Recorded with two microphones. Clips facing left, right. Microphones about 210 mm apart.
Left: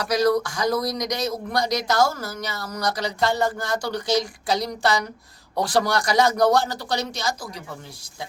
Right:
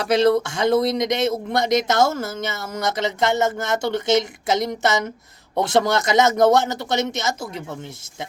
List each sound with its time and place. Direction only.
0.0 s speech: 25° right (ahead or behind)